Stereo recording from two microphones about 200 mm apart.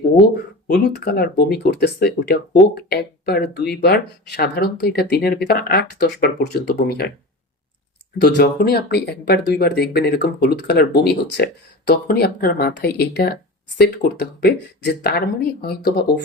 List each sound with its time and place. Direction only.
0.7 s speech: 55° left (ahead or behind)
8.2 s speech: 50° left (ahead or behind)